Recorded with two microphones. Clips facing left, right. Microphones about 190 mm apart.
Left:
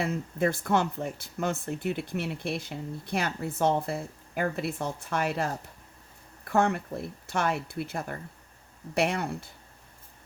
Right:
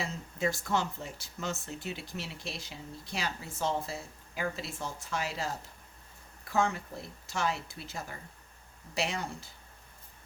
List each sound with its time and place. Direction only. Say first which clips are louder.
0.0 s speech: left 6 dB; 55° left (ahead or behind)